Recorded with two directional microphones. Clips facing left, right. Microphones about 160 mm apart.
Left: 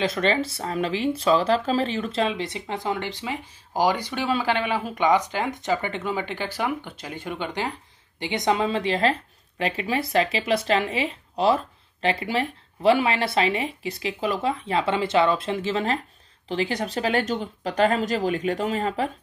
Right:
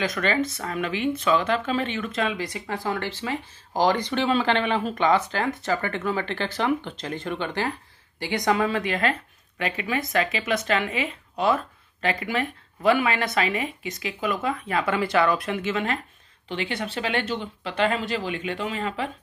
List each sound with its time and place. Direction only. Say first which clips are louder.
0.0 s speech: left 1 dB; 30° left (ahead or behind)